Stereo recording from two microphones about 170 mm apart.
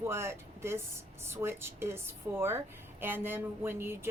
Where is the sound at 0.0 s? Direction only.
15° right (ahead or behind).